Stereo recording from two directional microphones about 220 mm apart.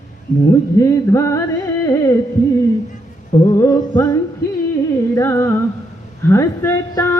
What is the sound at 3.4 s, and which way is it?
Music, 15° left (ahead or behind).